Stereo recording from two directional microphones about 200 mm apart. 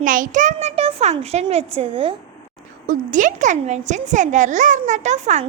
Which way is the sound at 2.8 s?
40° right (ahead or behind).